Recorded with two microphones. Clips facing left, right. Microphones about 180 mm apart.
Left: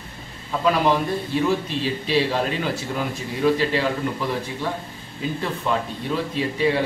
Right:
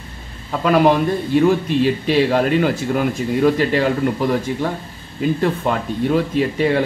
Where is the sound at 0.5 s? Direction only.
55° right (ahead or behind).